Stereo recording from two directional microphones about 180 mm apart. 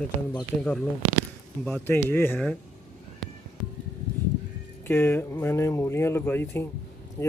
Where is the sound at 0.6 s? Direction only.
5° left (ahead or behind).